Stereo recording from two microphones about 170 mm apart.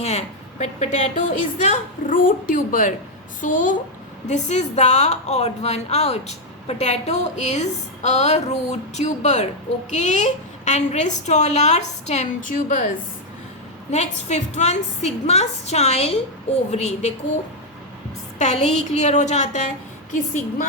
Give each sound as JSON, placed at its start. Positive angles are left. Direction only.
{"t": 0.0, "sound": "a woman's voice", "side_deg": 40}
{"t": 13.9, "sound": "a woman's voice", "side_deg": 40}
{"t": 18.3, "sound": "a woman's voice", "side_deg": 40}